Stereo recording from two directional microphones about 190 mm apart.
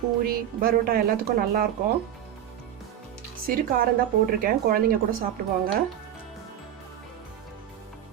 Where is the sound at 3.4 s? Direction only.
50° right (ahead or behind).